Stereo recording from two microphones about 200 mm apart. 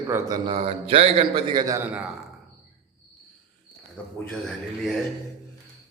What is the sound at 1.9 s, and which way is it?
Speech, 5° right (ahead or behind).